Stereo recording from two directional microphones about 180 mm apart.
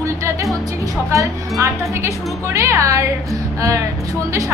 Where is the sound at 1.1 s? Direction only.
15° right (ahead or behind).